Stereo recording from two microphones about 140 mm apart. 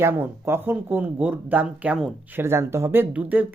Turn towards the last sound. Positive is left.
turn(degrees=-10)  # may be behind; listen again after turning